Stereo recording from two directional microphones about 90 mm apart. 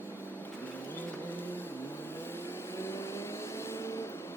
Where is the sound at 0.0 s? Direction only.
25° left (ahead or behind).